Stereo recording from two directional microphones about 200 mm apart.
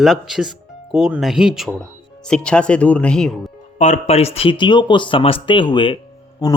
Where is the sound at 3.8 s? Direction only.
35° left (ahead or behind).